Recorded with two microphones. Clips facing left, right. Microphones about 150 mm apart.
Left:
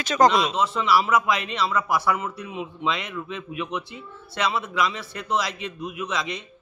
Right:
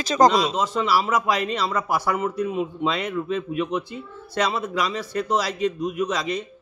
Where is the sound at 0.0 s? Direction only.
35° right (ahead or behind).